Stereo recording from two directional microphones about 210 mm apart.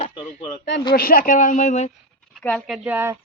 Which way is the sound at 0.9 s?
45° left (ahead or behind).